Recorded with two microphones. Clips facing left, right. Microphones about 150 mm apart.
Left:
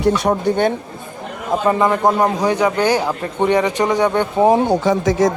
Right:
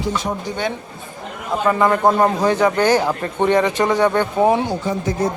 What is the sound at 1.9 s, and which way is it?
Speech, 10° left (ahead or behind).